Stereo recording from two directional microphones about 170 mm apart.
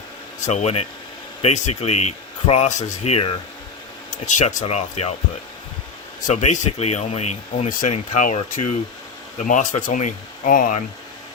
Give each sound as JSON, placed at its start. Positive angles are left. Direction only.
{"t": 0.4, "sound": "speech", "side_deg": 40}
{"t": 6.2, "sound": "speech", "side_deg": 45}